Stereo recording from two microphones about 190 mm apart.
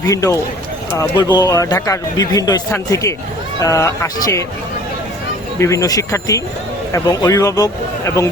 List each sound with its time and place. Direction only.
0.0 s speech: 15° left (ahead or behind)
5.5 s speech: 15° left (ahead or behind)